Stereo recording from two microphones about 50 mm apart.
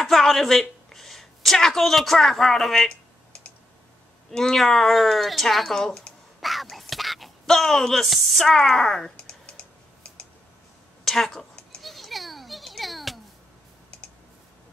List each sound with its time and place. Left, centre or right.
0.0 s a woman's voice: centre
4.3 s speech: centre
6.4 s whispering: centre
8.5 s speech: centre
9.1 s typing: centre
11.1 s a woman's voice: centre
11.8 s children playing: centre